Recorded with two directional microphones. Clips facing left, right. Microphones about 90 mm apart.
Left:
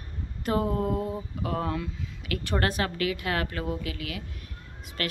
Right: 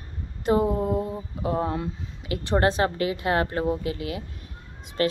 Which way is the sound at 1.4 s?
25° right (ahead or behind).